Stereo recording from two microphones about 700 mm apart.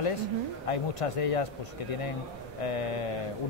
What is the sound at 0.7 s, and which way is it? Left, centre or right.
Speech, left.